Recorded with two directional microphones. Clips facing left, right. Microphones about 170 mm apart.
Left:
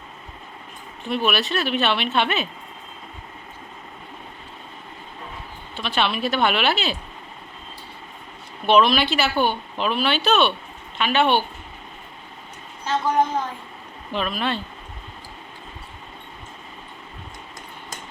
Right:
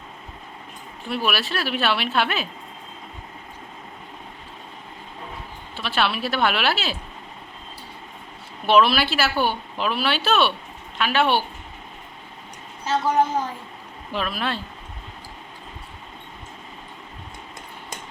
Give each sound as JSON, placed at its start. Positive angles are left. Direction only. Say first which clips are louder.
{"t": 1.0, "sound": "speech", "louder": "left 2 dB", "side_deg": -5}
{"t": 5.8, "sound": "speech", "louder": "left 1 dB", "side_deg": -5}
{"t": 8.6, "sound": "speech", "louder": "left 1 dB", "side_deg": -5}
{"t": 12.8, "sound": "a woman's voice", "louder": "even", "side_deg": -10}